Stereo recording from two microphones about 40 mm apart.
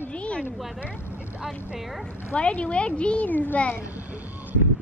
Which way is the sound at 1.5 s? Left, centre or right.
Centre.